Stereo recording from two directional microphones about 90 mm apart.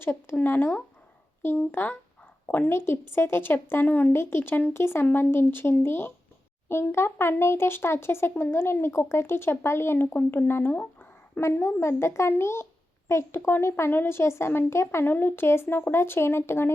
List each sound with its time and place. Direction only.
0.0 s speech: 25° left (ahead or behind)